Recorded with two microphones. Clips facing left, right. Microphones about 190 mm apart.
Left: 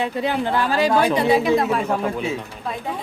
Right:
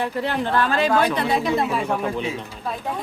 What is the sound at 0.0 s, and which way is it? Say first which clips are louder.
A man's voice: left 2 dB; 15° left (ahead or behind).